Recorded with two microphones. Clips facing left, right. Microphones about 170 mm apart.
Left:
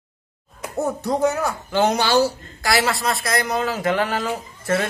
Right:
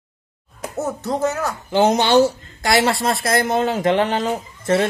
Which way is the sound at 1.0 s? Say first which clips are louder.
Left 1 dB; 15° left (ahead or behind).